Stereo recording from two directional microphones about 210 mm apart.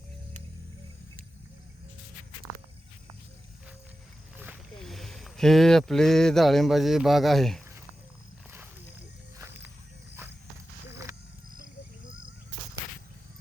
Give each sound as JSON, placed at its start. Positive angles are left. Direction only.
{"t": 4.8, "sound": "speech", "side_deg": 0}